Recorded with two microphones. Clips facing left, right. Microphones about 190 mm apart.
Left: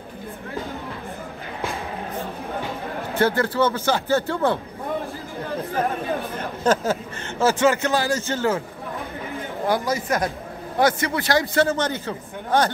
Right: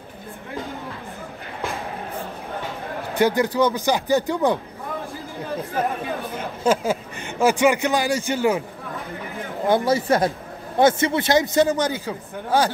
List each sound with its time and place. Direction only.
3.2 s a man's voice: 15° right (ahead or behind)
6.3 s a man's voice: 10° right (ahead or behind)
9.8 s a man's voice: 30° right (ahead or behind); by 12.7 s 10° right (ahead or behind)